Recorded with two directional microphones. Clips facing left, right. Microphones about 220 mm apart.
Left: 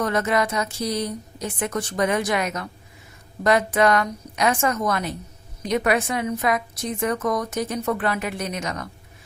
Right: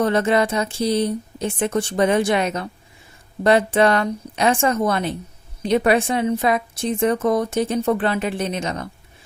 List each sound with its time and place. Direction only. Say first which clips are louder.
0.0 s a woman's voice: right 4 dB; 30° right (ahead or behind)